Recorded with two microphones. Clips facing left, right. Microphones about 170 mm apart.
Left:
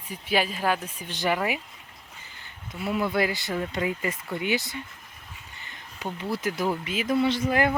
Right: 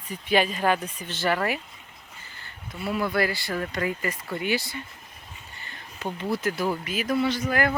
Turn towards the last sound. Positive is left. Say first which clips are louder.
# left 1 dB
turn(degrees=25)  # may be behind; listen again after turning